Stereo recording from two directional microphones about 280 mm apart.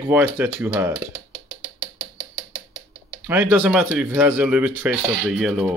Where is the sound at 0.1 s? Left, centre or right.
Centre.